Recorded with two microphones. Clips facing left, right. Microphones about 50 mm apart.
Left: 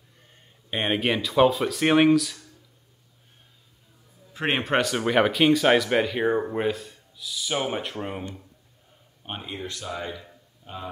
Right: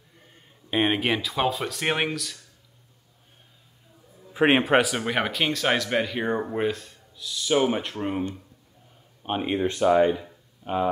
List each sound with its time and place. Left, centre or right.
0.3 s speech: centre
4.3 s speech: centre
9.4 s speech: right